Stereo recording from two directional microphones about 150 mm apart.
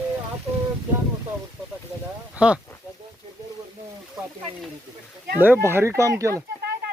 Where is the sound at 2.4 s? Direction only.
5° right (ahead or behind).